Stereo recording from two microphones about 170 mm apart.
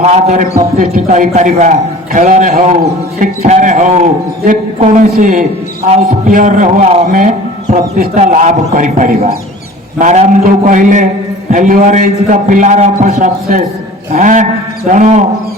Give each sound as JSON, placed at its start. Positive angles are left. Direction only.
{"t": 0.0, "sound": "a man's voice", "side_deg": -40}